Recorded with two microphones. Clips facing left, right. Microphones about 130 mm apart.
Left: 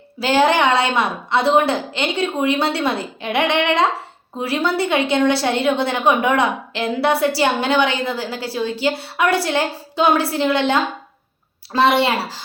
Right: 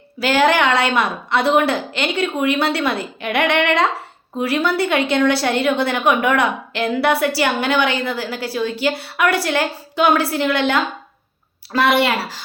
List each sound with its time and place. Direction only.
0.2 s a woman's voice: 25° left (ahead or behind)